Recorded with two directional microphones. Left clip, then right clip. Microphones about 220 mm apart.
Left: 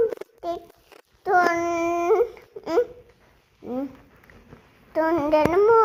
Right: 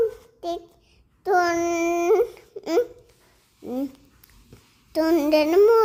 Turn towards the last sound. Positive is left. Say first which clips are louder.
# right 1 dB
turn(degrees=-45)  # may be behind; listen again after turning